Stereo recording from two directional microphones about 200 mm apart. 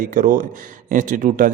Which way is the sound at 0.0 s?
40° right (ahead or behind).